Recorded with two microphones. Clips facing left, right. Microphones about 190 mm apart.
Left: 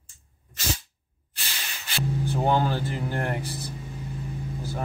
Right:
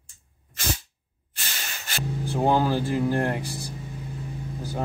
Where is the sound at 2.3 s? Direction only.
10° right (ahead or behind).